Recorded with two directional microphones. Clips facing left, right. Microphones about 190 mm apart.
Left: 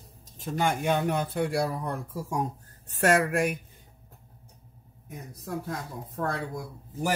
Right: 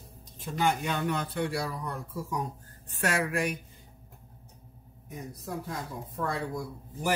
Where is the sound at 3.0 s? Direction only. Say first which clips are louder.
Left 6 dB; 50° left (ahead or behind).